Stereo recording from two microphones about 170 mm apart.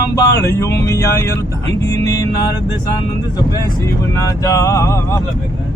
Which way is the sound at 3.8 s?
15° left (ahead or behind).